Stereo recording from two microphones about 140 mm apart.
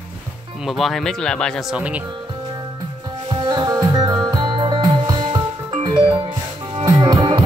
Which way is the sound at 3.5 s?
30° right (ahead or behind).